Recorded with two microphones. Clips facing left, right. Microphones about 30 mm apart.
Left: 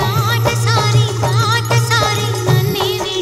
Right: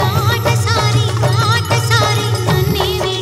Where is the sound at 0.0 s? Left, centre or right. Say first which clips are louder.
Right 1 dB; centre.